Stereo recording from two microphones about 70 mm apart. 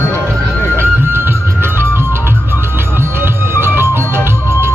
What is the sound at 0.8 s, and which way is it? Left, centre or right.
Music, right.